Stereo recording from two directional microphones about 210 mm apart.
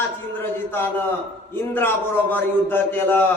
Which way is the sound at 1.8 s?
10° left (ahead or behind).